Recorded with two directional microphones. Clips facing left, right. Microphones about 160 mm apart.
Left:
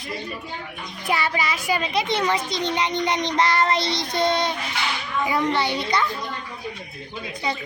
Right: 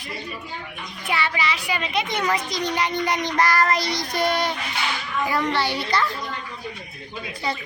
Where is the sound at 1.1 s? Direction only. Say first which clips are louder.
Left 1 dB; 40° left (ahead or behind); by 6.0 s 20° left (ahead or behind).